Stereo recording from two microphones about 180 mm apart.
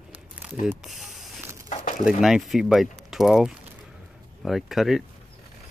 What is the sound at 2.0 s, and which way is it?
Speech, centre (ahead or behind).